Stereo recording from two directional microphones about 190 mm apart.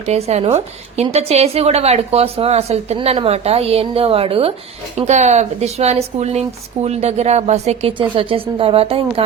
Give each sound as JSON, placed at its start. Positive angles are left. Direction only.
{"t": 0.0, "sound": "speech", "side_deg": -35}